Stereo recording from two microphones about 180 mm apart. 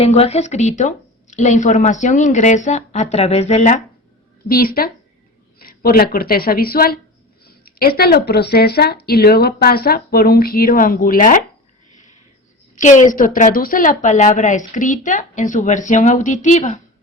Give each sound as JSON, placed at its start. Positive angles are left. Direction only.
{"t": 0.0, "sound": "a woman's voice", "side_deg": 35}
{"t": 4.4, "sound": "speech", "side_deg": 55}
{"t": 12.7, "sound": "a woman's voice", "side_deg": 40}